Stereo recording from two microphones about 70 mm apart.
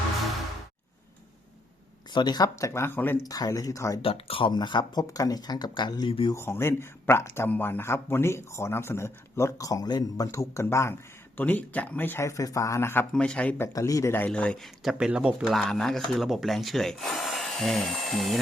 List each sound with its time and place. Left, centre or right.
2.1 s speech: left
2.6 s speech: left
3.2 s speech: left
4.5 s speech: left
6.3 s speech: left
9.6 s speech: left
10.5 s speech: left
11.3 s speech: left
12.2 s speech: left
13.1 s speech: centre
13.7 s speech: left
14.3 s speech: centre
14.9 s speech: centre
15.3 s speech: centre